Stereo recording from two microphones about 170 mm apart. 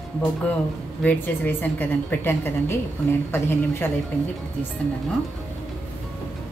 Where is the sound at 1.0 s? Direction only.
10° left (ahead or behind).